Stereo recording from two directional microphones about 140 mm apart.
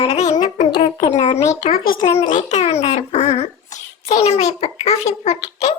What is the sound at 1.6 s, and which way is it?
Speech, 90° left.